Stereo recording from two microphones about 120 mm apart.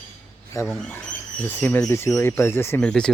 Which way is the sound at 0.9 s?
15° left (ahead or behind).